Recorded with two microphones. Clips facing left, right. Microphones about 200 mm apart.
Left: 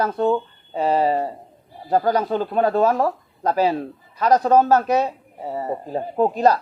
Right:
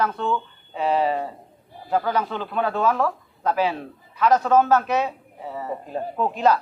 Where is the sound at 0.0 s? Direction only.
40° left (ahead or behind).